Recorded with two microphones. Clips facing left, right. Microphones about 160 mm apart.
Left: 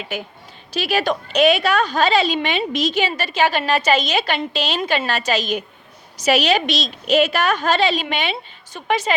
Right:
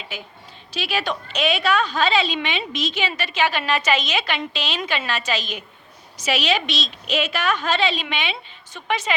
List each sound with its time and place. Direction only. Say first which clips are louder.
0.7 s a woman's voice: left 5 dB; 40° left (ahead or behind)